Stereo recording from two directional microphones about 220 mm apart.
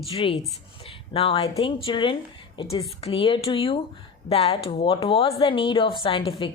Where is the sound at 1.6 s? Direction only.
25° left (ahead or behind).